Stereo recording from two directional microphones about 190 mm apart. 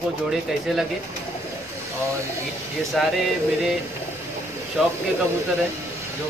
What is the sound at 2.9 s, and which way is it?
Speech, centre (ahead or behind).